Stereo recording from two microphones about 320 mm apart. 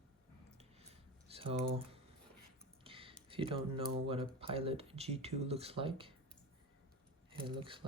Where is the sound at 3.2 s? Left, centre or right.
Centre.